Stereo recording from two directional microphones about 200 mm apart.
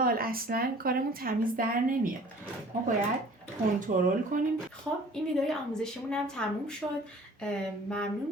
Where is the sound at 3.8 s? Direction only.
40° right (ahead or behind).